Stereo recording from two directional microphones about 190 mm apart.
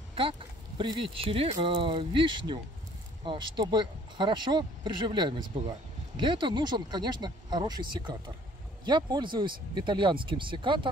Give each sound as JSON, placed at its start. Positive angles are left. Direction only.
{"t": 0.1, "sound": "speech", "side_deg": -30}